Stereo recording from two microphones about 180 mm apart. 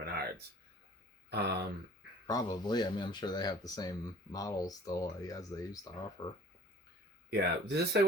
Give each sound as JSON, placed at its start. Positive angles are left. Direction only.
{"t": 0.0, "sound": "a sound", "side_deg": -60}
{"t": 1.3, "sound": "speech", "side_deg": -65}
{"t": 2.2, "sound": "speech", "side_deg": 20}
{"t": 7.3, "sound": "speech", "side_deg": -65}